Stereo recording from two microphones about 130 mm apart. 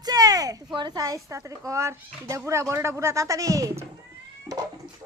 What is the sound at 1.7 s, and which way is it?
Speech, 25° right (ahead or behind).